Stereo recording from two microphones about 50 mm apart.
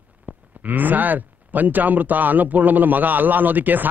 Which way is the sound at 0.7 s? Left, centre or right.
Right.